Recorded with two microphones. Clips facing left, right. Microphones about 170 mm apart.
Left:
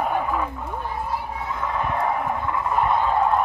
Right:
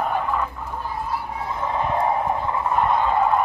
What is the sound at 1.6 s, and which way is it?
Clip-clop, 25° right (ahead or behind).